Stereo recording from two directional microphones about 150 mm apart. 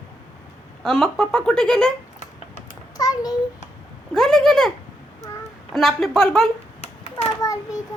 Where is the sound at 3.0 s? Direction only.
25° left (ahead or behind).